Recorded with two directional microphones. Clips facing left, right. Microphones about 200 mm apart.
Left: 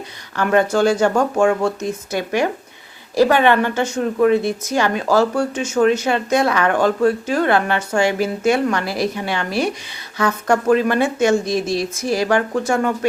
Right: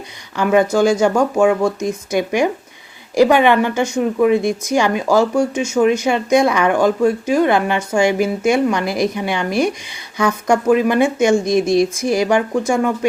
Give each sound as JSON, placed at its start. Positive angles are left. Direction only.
{"t": 0.3, "sound": "speech", "side_deg": -10}